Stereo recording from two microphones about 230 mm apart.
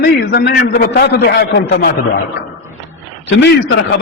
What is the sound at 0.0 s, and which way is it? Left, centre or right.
A man's voice, left.